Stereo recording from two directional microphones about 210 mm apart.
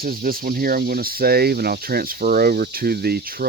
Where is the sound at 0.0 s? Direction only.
45° right (ahead or behind).